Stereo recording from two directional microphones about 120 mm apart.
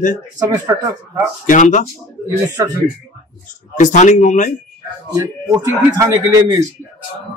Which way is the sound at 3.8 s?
90° left.